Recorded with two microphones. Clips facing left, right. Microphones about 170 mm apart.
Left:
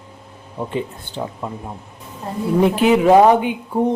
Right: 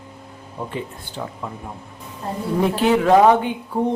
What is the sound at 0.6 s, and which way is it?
A woman's voice, 20° left (ahead or behind).